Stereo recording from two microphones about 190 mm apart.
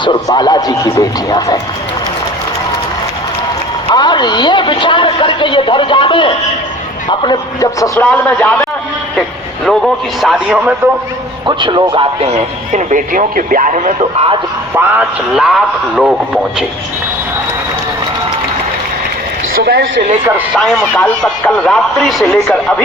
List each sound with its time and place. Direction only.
0.0 s a man's voice: 25° left (ahead or behind)
3.8 s a man's voice: 25° left (ahead or behind)
9.6 s a man's voice: centre (ahead or behind)
11.4 s speech: 25° right (ahead or behind)
14.8 s a man's voice: 5° right (ahead or behind)
19.5 s a woman's voice: 60° right (ahead or behind)
20.2 s speech: 10° right (ahead or behind)
20.6 s a man's voice: centre (ahead or behind)